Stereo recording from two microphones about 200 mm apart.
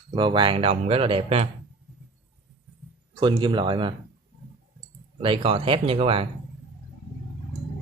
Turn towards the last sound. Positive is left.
turn(degrees=-30)  # may be behind; listen again after turning